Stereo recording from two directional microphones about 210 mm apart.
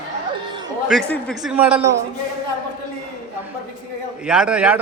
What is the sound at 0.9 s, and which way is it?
Speech, 5° left (ahead or behind).